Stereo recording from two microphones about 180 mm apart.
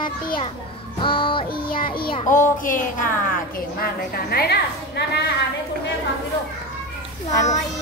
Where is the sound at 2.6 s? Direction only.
50° left (ahead or behind).